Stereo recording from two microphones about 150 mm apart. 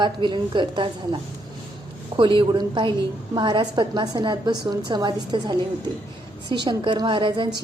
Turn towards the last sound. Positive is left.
turn(degrees=-30)  # may be behind; listen again after turning